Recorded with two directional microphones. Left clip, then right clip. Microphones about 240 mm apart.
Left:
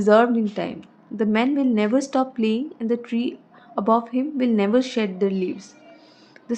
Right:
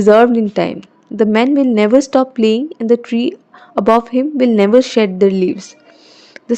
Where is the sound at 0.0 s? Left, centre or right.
Right.